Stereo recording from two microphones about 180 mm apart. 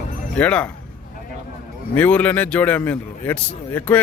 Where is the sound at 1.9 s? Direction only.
10° left (ahead or behind).